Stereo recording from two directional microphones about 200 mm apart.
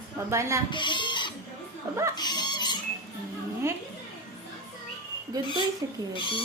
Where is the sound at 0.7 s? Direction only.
25° left (ahead or behind).